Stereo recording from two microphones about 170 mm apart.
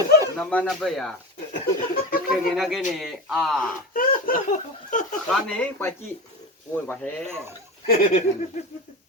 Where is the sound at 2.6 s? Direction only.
Centre (ahead or behind).